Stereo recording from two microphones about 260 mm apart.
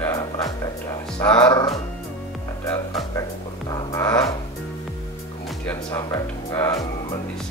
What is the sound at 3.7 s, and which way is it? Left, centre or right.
Music, centre.